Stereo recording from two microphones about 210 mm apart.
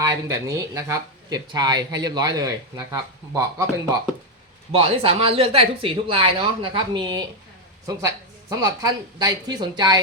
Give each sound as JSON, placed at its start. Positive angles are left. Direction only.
{"t": 0.3, "sound": "speech", "side_deg": -15}
{"t": 4.7, "sound": "speech", "side_deg": -25}